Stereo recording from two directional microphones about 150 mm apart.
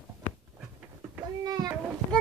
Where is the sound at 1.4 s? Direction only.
25° right (ahead or behind).